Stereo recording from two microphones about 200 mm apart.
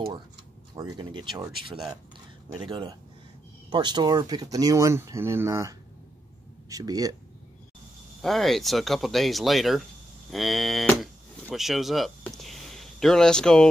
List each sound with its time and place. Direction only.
0.7 s speech: 20° right (ahead or behind)
2.6 s speech: 25° right (ahead or behind)
8.2 s speech: centre (ahead or behind)